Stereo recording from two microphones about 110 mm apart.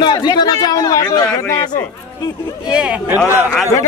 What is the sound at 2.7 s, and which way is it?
Speech, 10° right (ahead or behind).